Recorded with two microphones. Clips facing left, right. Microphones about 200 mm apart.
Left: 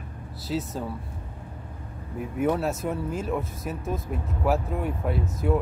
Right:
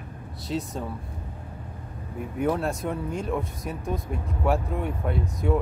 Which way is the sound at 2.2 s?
Centre (ahead or behind).